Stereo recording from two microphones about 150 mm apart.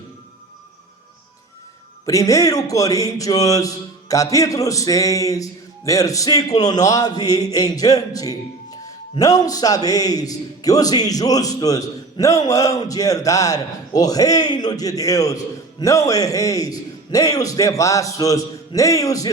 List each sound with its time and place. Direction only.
2.0 s music: 20° left (ahead or behind)